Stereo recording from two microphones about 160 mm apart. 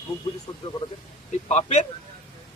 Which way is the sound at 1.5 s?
45° left (ahead or behind).